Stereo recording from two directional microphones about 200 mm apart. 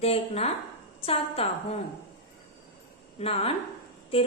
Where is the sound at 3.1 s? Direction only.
30° left (ahead or behind).